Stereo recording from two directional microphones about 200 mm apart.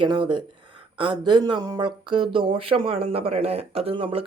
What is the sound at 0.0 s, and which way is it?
Speech, 25° right (ahead or behind).